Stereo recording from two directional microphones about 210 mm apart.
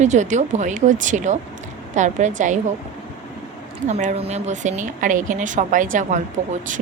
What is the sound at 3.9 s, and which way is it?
A woman's voice, 35° right (ahead or behind).